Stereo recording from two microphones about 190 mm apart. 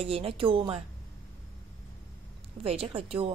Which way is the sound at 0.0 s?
30° right (ahead or behind).